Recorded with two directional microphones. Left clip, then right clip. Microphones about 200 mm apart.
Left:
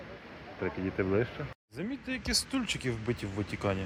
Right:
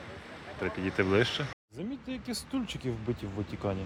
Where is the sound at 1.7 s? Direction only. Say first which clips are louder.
Left 3 dB; 10° right (ahead or behind).